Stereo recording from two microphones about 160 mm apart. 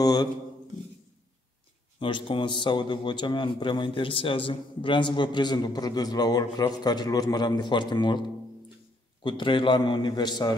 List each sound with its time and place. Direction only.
0.0 s speech: 25° left (ahead or behind)
2.0 s a man's voice: 30° left (ahead or behind)